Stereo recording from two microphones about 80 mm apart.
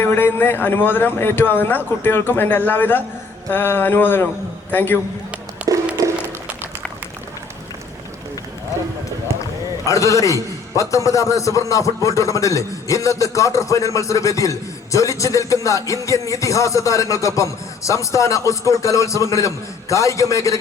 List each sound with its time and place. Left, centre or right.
0.0 s a man's voice: left
5.6 s a sound: centre
9.8 s speech: left